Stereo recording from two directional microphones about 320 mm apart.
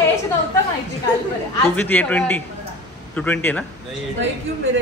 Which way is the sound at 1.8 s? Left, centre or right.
Centre.